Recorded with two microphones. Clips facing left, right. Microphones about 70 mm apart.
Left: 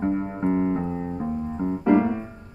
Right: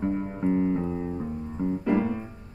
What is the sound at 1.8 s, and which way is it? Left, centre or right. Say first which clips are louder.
Music: left 7 dB; left.